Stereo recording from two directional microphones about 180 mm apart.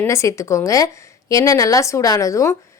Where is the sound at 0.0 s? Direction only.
15° left (ahead or behind).